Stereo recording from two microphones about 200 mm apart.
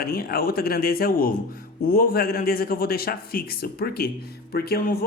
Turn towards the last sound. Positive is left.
turn(degrees=50)  # may be behind; listen again after turning